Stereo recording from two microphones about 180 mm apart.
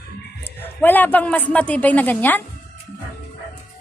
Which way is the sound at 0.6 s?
10° left (ahead or behind).